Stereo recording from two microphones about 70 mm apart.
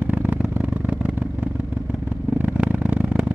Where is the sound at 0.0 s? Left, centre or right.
Right.